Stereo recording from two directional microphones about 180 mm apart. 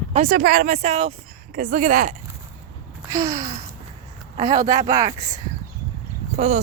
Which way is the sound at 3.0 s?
15° right (ahead or behind).